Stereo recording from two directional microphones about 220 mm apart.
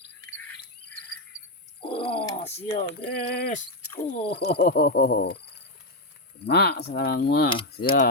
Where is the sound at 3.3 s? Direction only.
45° left (ahead or behind).